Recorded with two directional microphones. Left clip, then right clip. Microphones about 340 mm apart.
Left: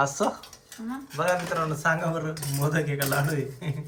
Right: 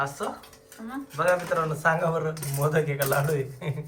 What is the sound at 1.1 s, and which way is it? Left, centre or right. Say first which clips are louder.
Speech: right 2 dB; centre.